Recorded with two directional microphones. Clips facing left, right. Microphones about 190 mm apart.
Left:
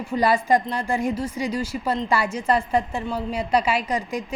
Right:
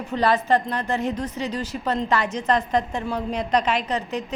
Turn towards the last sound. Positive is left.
turn(degrees=10)  # may be behind; listen again after turning